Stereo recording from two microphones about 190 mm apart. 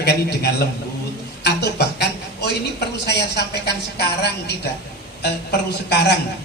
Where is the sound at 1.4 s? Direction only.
60° left (ahead or behind).